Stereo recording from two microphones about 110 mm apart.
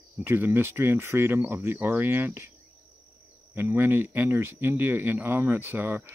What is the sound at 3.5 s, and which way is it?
Speech, 20° right (ahead or behind).